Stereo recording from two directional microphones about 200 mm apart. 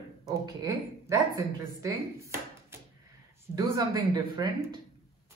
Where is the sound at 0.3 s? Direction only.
20° right (ahead or behind).